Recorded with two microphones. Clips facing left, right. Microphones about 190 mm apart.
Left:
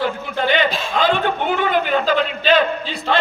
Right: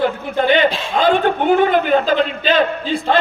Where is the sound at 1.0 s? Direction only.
50° right (ahead or behind).